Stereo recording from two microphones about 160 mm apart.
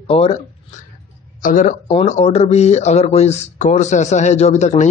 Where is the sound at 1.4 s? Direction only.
55° left (ahead or behind).